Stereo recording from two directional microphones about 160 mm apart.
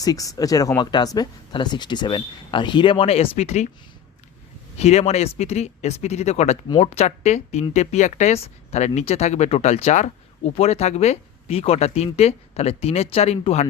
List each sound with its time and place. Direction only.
0.0 s speech: 20° left (ahead or behind); by 3.7 s 45° left (ahead or behind)
4.8 s speech: 40° left (ahead or behind)